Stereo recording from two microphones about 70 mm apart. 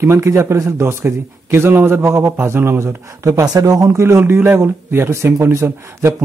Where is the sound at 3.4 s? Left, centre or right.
Right.